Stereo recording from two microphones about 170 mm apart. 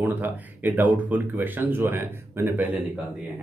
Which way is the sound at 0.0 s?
10° right (ahead or behind).